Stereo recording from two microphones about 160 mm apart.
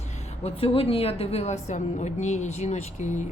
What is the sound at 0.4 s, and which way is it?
A woman's voice, 35° left (ahead or behind).